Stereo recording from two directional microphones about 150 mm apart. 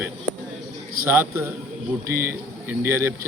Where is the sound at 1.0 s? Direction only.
15° right (ahead or behind).